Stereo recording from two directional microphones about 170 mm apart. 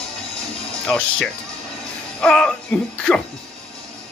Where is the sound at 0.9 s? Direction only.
10° left (ahead or behind).